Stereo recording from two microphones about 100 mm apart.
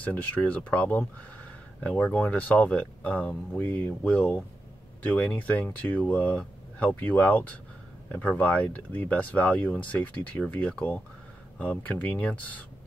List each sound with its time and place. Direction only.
0.0 s speech: 15° left (ahead or behind)